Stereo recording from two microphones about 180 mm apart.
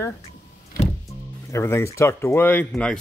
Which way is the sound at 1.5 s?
15° left (ahead or behind).